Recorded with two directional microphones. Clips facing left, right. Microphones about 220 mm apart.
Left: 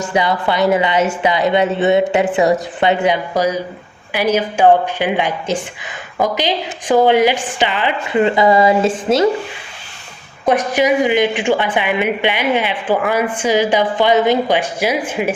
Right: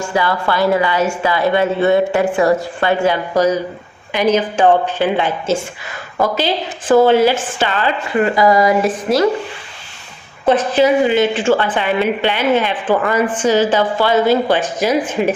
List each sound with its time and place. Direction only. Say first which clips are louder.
0.0 s a woman's voice: left 1 dB; 20° left (ahead or behind)
10.4 s speech: right 2 dB; 15° left (ahead or behind)